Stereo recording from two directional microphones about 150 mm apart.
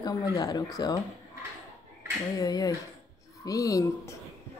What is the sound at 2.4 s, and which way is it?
Speech, 25° left (ahead or behind).